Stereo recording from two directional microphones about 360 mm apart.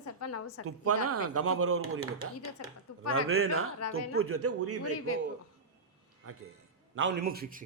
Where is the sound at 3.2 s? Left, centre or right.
Right.